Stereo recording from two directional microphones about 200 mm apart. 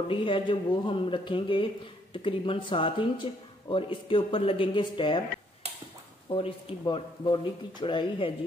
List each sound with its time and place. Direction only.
0.1 s speech: 25° left (ahead or behind)
6.2 s speech: 25° left (ahead or behind)